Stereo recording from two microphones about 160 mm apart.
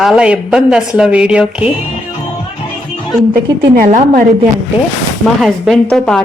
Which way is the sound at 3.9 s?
60° right (ahead or behind).